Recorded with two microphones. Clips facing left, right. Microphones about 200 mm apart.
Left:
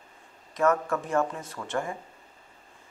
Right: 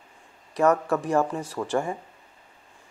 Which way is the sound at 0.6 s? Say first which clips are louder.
Right 3 dB; 35° right (ahead or behind).